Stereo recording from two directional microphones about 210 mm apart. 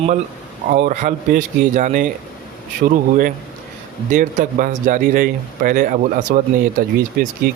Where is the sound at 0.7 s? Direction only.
35° right (ahead or behind).